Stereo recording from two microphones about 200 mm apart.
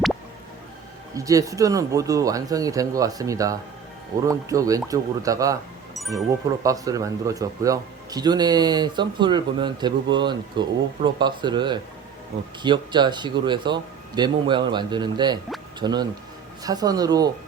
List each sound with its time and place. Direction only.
1.1 s speech: 15° right (ahead or behind)
6.6 s speech: 15° right (ahead or behind)